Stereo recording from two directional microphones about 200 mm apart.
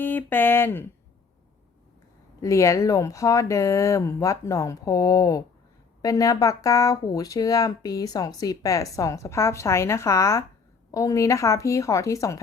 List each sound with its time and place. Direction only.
0.0 s speech: 10° left (ahead or behind)
2.4 s speech: 15° left (ahead or behind)